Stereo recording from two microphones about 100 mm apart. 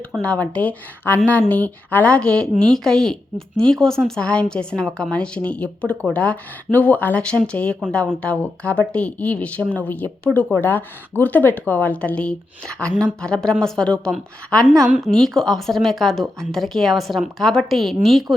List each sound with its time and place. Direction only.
0.2 s speech: 15° left (ahead or behind)